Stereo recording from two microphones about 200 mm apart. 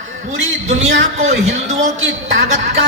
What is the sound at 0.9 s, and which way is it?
Speech, 70° right (ahead or behind).